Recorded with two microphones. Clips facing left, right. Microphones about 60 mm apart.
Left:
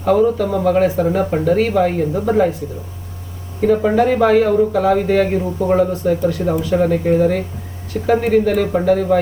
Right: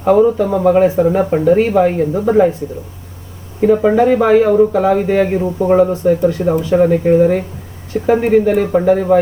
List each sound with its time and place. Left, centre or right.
0.0 s speech: right
3.6 s speech: centre